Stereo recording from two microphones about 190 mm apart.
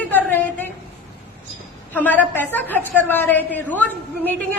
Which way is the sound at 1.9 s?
10° left (ahead or behind).